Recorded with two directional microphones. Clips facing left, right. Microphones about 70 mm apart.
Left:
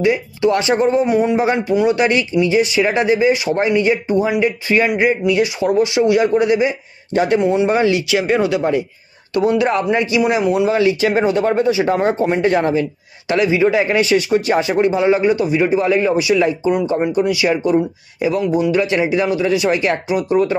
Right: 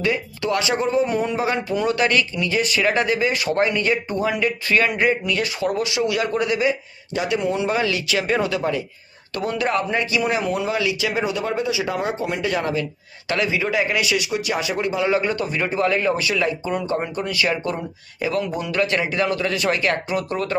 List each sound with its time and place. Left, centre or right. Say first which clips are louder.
0.0 s speech: left 7 dB; left
8.1 s speech: left 5 dB; centre
10.7 s speech: left 8 dB; left
13.3 s speech: left 7 dB; left
15.2 s speech: left 8 dB; centre